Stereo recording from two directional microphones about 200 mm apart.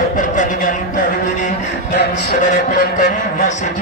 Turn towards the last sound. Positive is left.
turn(degrees=40)  # may be behind; listen again after turning